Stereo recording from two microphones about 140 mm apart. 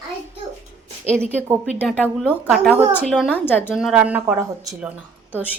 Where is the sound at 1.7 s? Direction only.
5° left (ahead or behind).